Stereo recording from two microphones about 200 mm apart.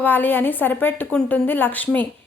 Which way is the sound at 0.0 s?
10° left (ahead or behind).